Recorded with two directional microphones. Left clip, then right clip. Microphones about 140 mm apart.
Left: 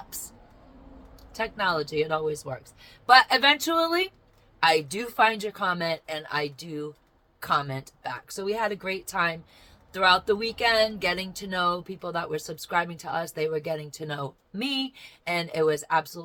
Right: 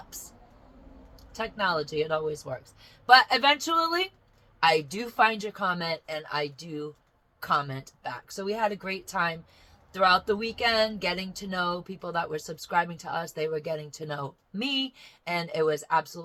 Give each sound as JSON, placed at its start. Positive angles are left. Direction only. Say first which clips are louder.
{"t": 1.3, "sound": "speech", "louder": "left 1 dB", "side_deg": 20}